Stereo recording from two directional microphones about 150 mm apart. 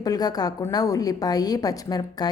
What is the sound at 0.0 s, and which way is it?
A woman's voice, 25° left (ahead or behind).